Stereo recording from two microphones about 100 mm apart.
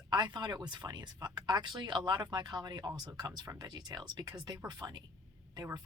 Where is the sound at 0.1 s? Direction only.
45° right (ahead or behind).